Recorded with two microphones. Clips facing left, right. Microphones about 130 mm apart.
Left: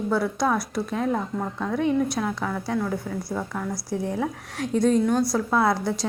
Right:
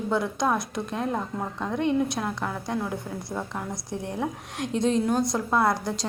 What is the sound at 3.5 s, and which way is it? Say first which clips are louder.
Speech: left 3 dB; 20° right (ahead or behind).